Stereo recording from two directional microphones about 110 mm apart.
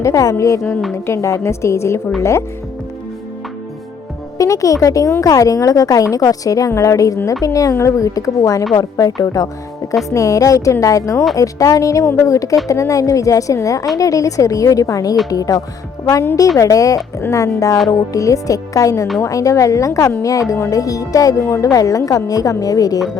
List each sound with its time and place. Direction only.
0.0 s speech: 30° left (ahead or behind)
4.4 s speech: 30° left (ahead or behind)